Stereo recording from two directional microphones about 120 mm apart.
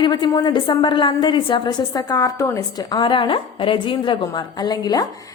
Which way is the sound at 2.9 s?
45° left (ahead or behind).